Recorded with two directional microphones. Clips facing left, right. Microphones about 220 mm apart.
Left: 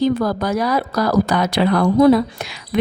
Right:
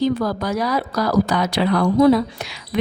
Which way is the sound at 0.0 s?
55° left (ahead or behind).